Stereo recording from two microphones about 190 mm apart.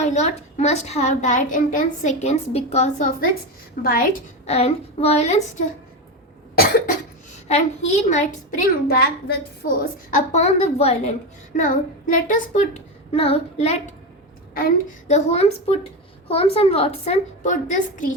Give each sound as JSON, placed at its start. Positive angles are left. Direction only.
{"t": 0.0, "sound": "a woman's voice", "side_deg": 35}
{"t": 3.8, "sound": "a woman's voice", "side_deg": 50}
{"t": 4.4, "sound": "a woman's voice", "side_deg": 35}
{"t": 7.4, "sound": "a woman's voice", "side_deg": 35}